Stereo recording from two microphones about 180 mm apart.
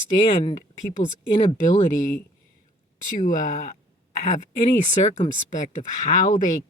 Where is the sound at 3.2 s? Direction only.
45° left (ahead or behind).